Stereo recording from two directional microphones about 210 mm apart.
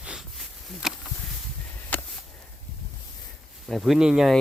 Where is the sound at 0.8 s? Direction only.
Centre (ahead or behind).